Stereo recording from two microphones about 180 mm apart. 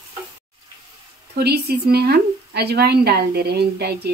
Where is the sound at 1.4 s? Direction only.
60° right (ahead or behind).